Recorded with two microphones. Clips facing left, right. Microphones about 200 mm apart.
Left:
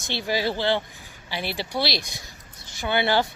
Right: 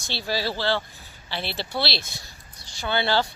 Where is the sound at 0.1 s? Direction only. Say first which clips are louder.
Left 2 dB; 15° left (ahead or behind).